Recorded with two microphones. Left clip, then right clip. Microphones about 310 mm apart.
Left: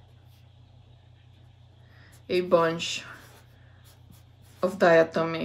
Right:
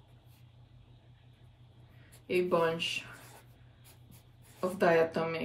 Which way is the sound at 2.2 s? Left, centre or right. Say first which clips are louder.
Left 7 dB; left.